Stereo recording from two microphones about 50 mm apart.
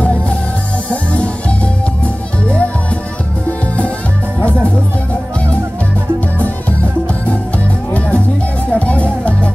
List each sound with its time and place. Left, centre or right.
0.0 s music: left
7.2 s music: left